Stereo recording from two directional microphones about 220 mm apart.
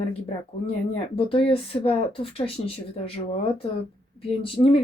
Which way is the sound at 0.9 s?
25° left (ahead or behind).